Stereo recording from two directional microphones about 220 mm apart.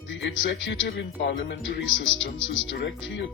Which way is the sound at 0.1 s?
55° left (ahead or behind).